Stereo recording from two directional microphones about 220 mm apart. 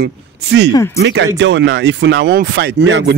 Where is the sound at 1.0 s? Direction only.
55° right (ahead or behind).